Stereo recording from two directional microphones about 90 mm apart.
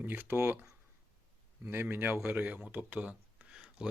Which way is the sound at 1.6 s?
25° right (ahead or behind).